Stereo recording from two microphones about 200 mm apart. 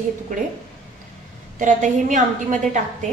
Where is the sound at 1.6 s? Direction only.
40° right (ahead or behind).